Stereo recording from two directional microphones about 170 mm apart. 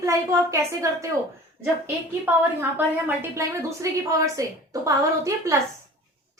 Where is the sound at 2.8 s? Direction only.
10° right (ahead or behind).